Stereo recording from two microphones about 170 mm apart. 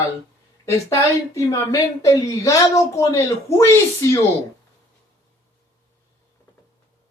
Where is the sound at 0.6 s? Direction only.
15° left (ahead or behind).